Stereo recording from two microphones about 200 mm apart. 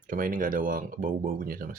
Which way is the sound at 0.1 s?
45° right (ahead or behind).